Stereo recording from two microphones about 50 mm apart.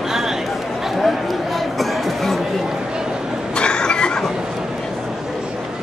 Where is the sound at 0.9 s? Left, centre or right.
Centre.